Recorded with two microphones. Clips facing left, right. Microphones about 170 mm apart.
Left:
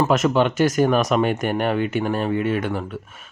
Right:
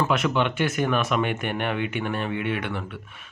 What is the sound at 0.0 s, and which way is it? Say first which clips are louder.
Speech: left 5 dB; 40° left (ahead or behind).